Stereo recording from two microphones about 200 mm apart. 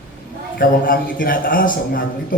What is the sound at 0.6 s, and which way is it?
A man's voice, 45° left (ahead or behind).